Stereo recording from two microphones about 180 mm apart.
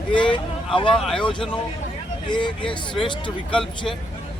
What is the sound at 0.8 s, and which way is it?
Speech, 30° left (ahead or behind).